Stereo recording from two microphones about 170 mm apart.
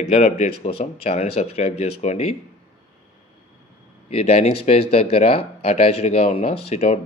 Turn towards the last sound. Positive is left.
turn(degrees=40)  # may be behind; listen again after turning